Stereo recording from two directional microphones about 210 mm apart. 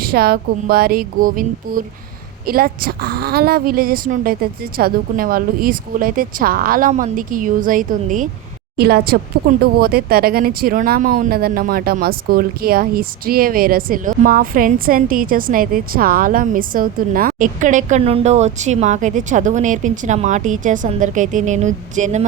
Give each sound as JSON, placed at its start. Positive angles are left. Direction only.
{"t": 0.0, "sound": "a woman's voice", "side_deg": -45}